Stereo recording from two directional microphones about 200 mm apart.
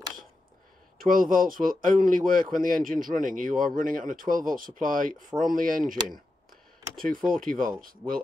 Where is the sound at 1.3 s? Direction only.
45° right (ahead or behind).